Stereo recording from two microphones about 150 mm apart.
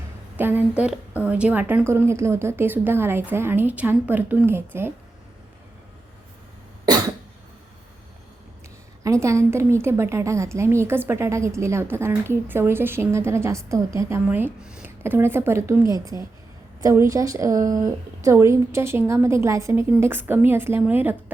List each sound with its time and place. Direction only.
0.3 s a woman's voice: 10° right (ahead or behind)
9.0 s a woman's voice: 20° right (ahead or behind)